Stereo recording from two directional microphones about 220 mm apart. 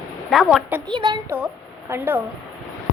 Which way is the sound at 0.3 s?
Centre (ahead or behind).